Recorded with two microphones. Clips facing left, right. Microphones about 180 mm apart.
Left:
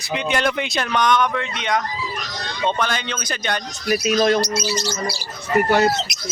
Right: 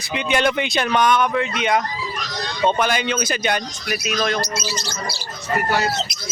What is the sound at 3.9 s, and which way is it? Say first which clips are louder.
Speech: left 6 dB; 35° left (ahead or behind).